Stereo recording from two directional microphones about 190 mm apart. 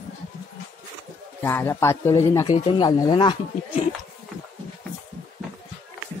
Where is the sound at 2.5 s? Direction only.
25° left (ahead or behind).